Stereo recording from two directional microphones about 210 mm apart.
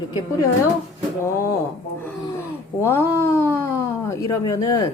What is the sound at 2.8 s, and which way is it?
Speech, 10° left (ahead or behind).